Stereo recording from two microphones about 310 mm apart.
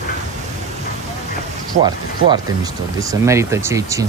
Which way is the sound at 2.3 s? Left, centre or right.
Centre.